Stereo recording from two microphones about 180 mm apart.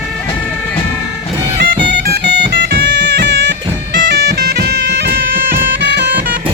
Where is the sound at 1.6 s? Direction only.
70° right (ahead or behind).